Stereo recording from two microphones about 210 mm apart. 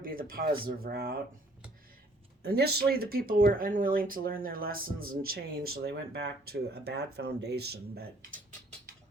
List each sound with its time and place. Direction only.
0.0 s speech: 45° right (ahead or behind)
2.4 s speech: 50° right (ahead or behind)